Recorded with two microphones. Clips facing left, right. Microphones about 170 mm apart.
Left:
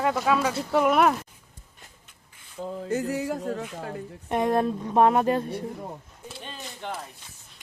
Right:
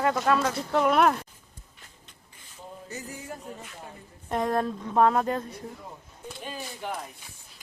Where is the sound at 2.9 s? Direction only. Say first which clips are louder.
Left 13 dB; 65° left (ahead or behind); by 4.0 s 80° left.